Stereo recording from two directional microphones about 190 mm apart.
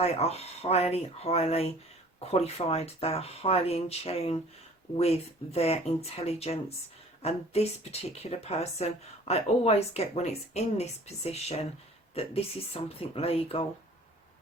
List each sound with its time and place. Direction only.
0.0 s speech: 35° left (ahead or behind)